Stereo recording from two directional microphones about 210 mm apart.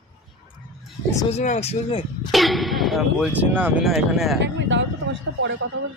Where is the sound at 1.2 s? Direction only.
35° left (ahead or behind).